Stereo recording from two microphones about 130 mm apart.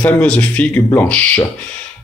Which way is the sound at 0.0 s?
10° left (ahead or behind).